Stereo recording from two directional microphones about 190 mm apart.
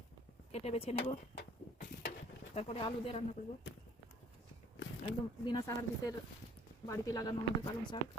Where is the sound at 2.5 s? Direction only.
35° left (ahead or behind).